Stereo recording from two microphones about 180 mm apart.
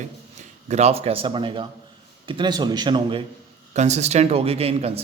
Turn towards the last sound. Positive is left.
turn(degrees=-35)  # may be behind; listen again after turning